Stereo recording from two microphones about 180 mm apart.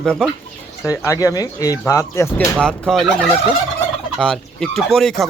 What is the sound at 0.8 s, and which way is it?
Speech, 15° left (ahead or behind).